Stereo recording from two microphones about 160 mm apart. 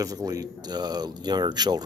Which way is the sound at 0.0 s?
20° right (ahead or behind).